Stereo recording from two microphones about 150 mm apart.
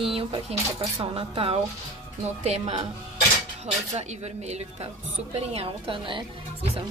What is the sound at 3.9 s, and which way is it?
A woman's voice, 45° right (ahead or behind).